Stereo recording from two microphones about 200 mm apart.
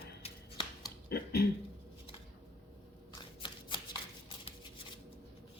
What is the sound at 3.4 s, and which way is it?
Shuffling cards, 25° left (ahead or behind).